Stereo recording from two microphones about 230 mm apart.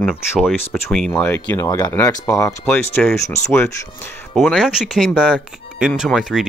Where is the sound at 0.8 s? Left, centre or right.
Centre.